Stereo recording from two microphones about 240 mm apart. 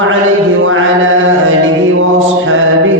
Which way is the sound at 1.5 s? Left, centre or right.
Right.